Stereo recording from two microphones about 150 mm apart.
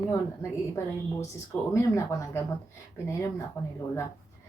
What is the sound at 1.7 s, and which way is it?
Speech, 20° left (ahead or behind).